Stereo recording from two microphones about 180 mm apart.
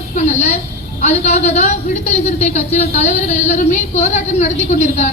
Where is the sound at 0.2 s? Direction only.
40° left (ahead or behind).